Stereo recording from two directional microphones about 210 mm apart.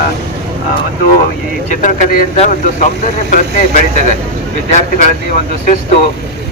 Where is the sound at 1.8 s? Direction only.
35° left (ahead or behind).